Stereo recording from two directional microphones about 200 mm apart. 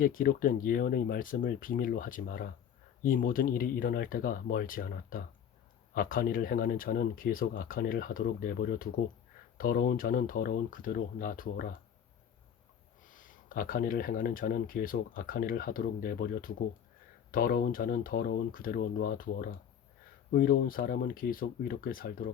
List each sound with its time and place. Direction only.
0.0 s speech: 45° left (ahead or behind)
13.1 s speech: 45° left (ahead or behind)